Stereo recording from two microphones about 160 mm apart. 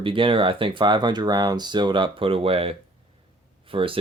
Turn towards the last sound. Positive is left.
turn(degrees=-35)  # may be behind; listen again after turning